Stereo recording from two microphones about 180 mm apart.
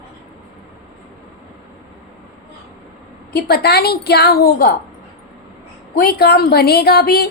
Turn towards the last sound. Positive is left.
turn(degrees=60)  # may be behind; listen again after turning